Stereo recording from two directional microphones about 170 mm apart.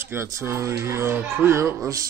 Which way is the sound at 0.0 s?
15° right (ahead or behind).